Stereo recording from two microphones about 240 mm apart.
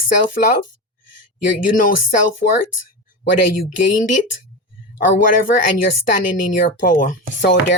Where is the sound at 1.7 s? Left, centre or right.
Left.